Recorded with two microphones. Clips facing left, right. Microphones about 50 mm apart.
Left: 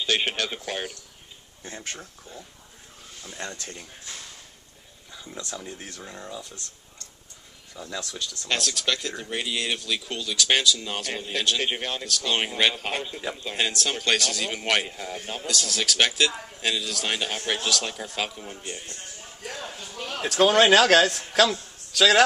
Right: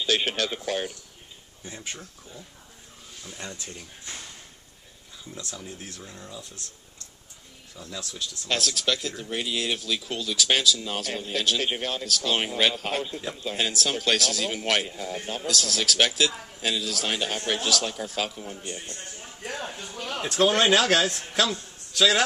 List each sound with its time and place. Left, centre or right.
0.0 s speech: centre
5.1 s speech: centre
6.0 s speech: centre
7.7 s speech: centre
19.6 s a sound: centre
20.2 s speech: centre